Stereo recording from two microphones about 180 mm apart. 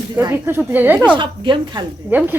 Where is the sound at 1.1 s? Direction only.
25° right (ahead or behind).